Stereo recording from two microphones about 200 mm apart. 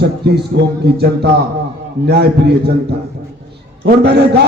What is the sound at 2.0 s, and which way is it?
Speech, 55° right (ahead or behind).